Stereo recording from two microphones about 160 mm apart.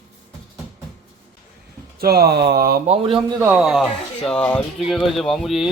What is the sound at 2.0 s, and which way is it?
Speech, 75° right (ahead or behind).